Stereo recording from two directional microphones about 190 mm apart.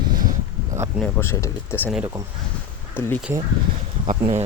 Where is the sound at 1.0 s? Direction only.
10° left (ahead or behind).